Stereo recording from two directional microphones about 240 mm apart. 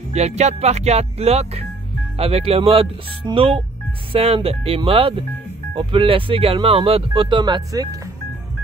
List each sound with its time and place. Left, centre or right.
0.1 s speech: right